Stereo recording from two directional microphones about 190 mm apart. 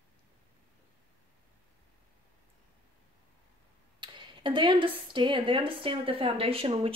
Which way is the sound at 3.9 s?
25° right (ahead or behind).